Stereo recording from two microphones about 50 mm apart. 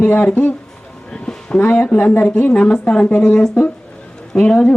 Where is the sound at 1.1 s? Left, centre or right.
Centre.